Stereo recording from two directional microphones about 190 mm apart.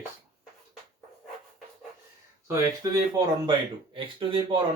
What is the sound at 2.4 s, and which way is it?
Speech, 20° right (ahead or behind).